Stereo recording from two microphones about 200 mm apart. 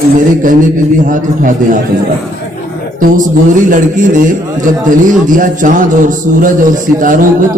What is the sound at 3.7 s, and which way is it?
A man's voice, 40° right (ahead or behind).